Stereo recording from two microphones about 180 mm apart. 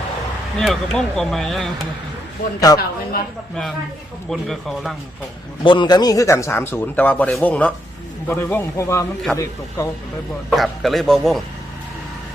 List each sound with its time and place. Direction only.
0.6 s speech: centre (ahead or behind)
2.7 s a woman's voice: 20° left (ahead or behind)
4.3 s speech: centre (ahead or behind)
5.6 s speech: 25° left (ahead or behind)
10.5 s speech: centre (ahead or behind)